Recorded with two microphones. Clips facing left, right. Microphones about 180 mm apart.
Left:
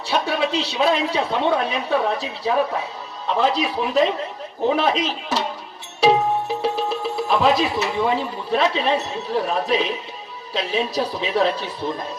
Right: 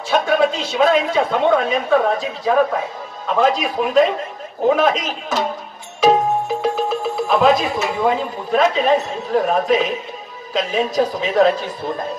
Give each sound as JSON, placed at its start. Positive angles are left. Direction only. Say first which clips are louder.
{"t": 0.1, "sound": "a woman's voice", "louder": "right 5 dB", "side_deg": -50}